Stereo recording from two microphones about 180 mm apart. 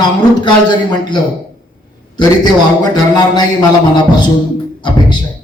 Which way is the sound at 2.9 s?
20° left (ahead or behind).